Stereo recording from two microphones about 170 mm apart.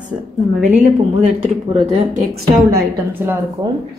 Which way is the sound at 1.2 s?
40° right (ahead or behind).